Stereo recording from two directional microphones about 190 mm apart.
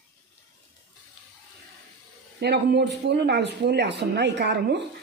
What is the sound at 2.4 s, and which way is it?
Speech, 60° right (ahead or behind).